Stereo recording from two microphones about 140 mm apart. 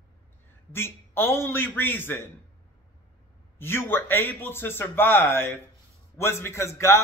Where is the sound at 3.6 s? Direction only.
15° left (ahead or behind).